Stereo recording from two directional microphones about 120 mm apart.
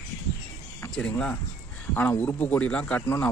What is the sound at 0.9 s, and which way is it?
Speech, 10° left (ahead or behind).